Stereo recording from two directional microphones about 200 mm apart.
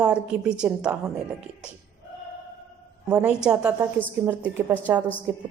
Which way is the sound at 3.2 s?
5° right (ahead or behind).